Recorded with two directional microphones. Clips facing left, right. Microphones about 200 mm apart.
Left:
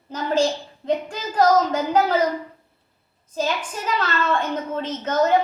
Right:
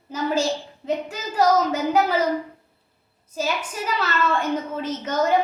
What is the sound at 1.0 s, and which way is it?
A woman's voice, 10° right (ahead or behind).